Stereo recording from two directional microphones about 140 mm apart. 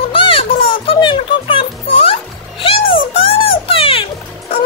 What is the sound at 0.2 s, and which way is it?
Music, 40° left (ahead or behind).